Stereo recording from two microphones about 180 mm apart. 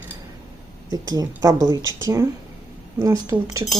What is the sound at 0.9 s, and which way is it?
Speech, 20° right (ahead or behind).